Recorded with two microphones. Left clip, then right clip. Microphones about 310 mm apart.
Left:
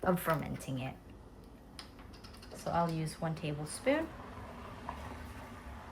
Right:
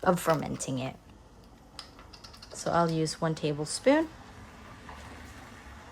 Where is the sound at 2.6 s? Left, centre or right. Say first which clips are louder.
Right 7 dB; centre.